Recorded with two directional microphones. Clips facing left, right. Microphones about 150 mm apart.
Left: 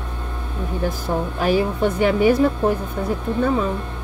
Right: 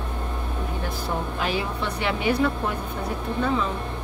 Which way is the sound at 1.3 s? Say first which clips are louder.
Left 7 dB; 45° left (ahead or behind).